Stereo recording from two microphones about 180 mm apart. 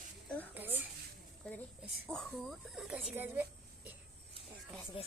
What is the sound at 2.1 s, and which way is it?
Speech, centre (ahead or behind).